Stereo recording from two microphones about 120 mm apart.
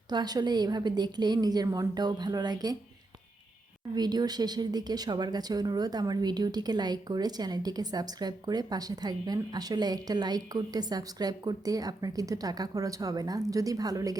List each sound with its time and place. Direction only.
0.1 s speech: 35° right (ahead or behind)
3.9 s speech: 35° right (ahead or behind)